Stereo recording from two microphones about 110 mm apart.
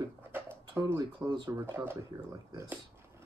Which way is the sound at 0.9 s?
40° right (ahead or behind).